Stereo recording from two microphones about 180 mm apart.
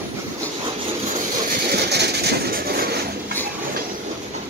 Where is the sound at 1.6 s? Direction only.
65° right (ahead or behind).